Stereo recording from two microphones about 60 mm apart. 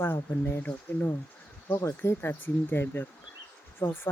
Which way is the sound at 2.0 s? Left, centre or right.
Left.